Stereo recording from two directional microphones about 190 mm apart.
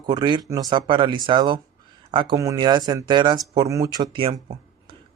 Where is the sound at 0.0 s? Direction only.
20° right (ahead or behind).